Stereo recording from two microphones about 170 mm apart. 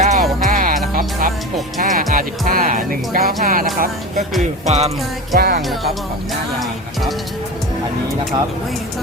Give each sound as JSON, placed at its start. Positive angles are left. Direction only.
{"t": 0.0, "sound": "music", "side_deg": -45}
{"t": 1.8, "sound": "speech", "side_deg": -50}
{"t": 4.6, "sound": "music", "side_deg": -40}
{"t": 5.4, "sound": "music", "side_deg": -65}